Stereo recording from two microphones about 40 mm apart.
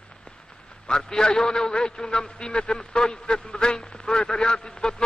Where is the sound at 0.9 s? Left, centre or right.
Centre.